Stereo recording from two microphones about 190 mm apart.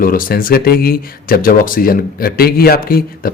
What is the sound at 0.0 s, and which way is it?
Speech, 50° left (ahead or behind).